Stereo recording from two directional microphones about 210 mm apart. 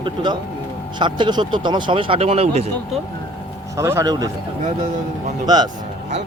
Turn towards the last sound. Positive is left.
turn(degrees=-20)  # may be behind; listen again after turning